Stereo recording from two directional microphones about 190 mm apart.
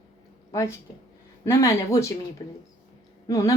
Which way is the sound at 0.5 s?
15° left (ahead or behind).